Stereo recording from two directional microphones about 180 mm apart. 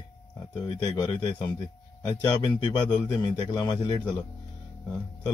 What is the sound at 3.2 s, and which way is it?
Speech, 25° left (ahead or behind).